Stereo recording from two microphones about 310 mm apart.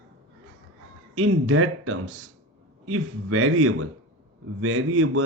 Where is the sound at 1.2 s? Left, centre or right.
Right.